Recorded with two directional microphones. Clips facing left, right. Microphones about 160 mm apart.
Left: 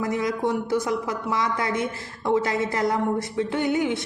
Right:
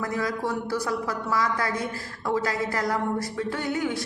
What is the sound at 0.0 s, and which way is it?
A woman's voice, 20° left (ahead or behind).